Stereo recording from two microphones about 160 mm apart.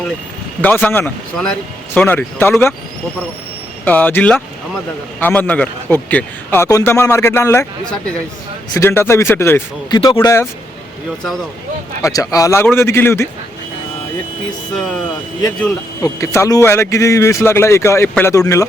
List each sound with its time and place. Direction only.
0.6 s speech: 10° left (ahead or behind)
3.8 s speech: 10° left (ahead or behind)
8.7 s speech: 15° left (ahead or behind)
9.9 s speech: 30° left (ahead or behind)
12.0 s speech: 20° left (ahead or behind)
16.0 s speech: 20° left (ahead or behind)